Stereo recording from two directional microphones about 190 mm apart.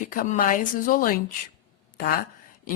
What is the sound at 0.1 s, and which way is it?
A woman's voice, 45° left (ahead or behind).